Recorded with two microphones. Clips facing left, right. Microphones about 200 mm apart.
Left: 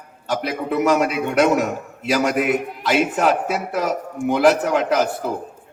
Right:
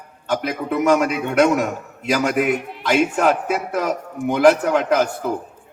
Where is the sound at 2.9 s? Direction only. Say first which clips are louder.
Right 1 dB; 45° right (ahead or behind).